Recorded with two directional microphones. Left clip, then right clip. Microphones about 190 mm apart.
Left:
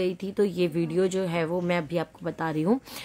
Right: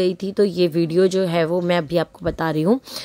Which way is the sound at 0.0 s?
25° right (ahead or behind).